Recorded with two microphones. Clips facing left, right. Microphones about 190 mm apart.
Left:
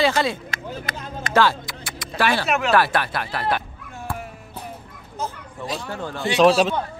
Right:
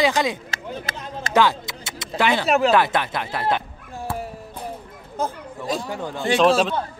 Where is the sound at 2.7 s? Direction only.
20° right (ahead or behind).